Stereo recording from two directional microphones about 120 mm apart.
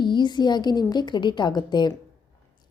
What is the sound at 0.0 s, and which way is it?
A woman's voice, 40° left (ahead or behind).